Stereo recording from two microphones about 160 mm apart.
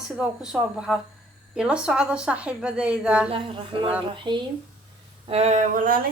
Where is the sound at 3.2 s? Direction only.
30° right (ahead or behind).